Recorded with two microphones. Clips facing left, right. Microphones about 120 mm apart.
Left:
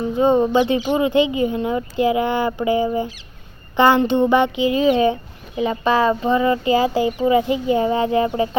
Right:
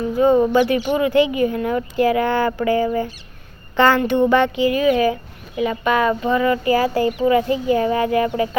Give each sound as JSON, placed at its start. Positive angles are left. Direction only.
{"t": 0.0, "sound": "speech", "side_deg": 20}